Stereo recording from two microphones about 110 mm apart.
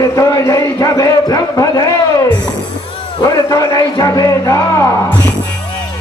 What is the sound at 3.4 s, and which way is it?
A man's voice, 30° left (ahead or behind).